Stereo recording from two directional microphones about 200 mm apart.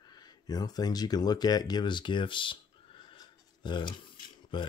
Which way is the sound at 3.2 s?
20° left (ahead or behind).